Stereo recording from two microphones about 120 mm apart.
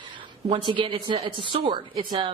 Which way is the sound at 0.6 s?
45° right (ahead or behind).